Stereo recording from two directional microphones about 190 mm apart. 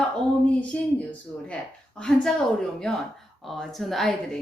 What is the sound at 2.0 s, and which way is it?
Speech, 5° left (ahead or behind).